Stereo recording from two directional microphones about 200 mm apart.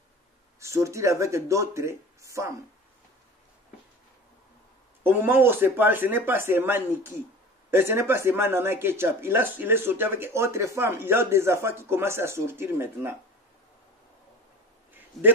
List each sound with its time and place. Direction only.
0.6 s speech: 15° right (ahead or behind)
5.0 s speech: 10° right (ahead or behind)